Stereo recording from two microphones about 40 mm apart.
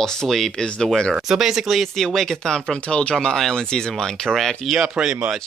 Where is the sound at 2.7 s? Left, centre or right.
Left.